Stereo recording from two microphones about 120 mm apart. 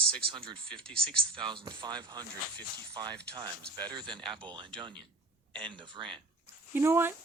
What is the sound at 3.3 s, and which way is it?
Speech, 35° right (ahead or behind).